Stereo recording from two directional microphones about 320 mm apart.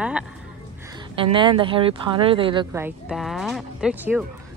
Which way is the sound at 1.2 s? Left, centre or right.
Centre.